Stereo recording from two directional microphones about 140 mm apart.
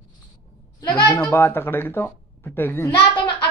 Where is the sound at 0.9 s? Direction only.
30° left (ahead or behind).